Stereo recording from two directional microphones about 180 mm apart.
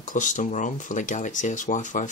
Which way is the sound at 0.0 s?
45° left (ahead or behind).